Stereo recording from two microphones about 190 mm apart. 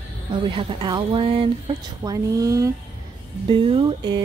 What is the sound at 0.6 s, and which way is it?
Speech, 25° right (ahead or behind).